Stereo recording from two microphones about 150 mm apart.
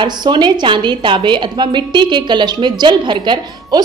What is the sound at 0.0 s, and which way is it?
A woman's voice, 30° right (ahead or behind).